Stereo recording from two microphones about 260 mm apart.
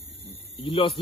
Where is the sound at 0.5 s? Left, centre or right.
Centre.